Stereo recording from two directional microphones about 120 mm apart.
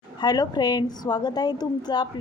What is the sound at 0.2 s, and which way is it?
A woman's voice, 35° left (ahead or behind).